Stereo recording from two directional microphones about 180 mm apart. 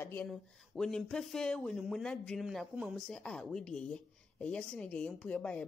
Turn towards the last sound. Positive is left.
turn(degrees=5)  # may be behind; listen again after turning